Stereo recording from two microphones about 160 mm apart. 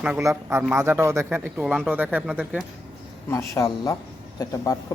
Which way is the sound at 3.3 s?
20° left (ahead or behind).